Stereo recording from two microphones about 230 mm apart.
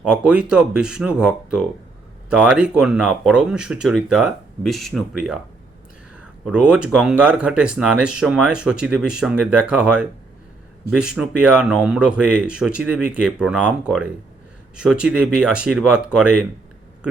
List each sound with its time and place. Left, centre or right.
0.0 s speech: centre
6.4 s speech: centre